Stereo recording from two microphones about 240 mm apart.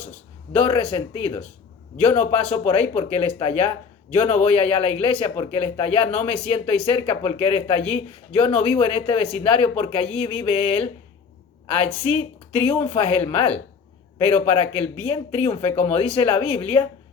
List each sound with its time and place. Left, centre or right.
0.5 s speech: left